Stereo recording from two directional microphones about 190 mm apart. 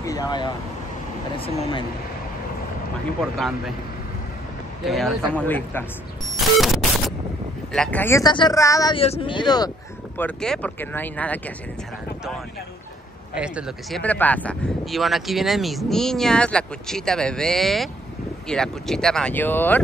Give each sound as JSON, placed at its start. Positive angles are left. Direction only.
{"t": 0.0, "sound": "speech", "side_deg": 20}
{"t": 3.2, "sound": "speech", "side_deg": 0}
{"t": 4.8, "sound": "speech", "side_deg": 0}
{"t": 6.3, "sound": "a sound", "side_deg": 0}
{"t": 7.7, "sound": "speech", "side_deg": 5}
{"t": 8.9, "sound": "speech", "side_deg": 30}
{"t": 10.1, "sound": "speech", "side_deg": 5}
{"t": 13.3, "sound": "speech", "side_deg": -5}